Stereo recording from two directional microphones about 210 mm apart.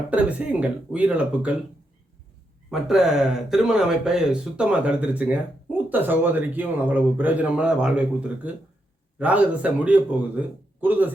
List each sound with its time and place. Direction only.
0.1 s a man's voice: 5° right (ahead or behind)
2.6 s a man's voice: centre (ahead or behind)